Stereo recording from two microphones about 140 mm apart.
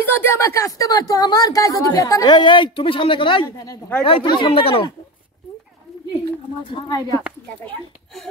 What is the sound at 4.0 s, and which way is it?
Speech, 40° left (ahead or behind).